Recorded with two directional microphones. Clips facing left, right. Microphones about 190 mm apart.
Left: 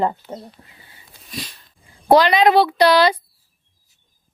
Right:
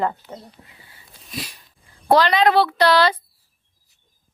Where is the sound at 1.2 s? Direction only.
Centre (ahead or behind).